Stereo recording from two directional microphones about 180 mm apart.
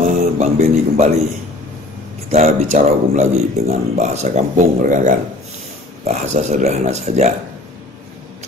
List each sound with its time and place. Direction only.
0.0 s music: 40° right (ahead or behind)
2.3 s a man's voice: 40° right (ahead or behind)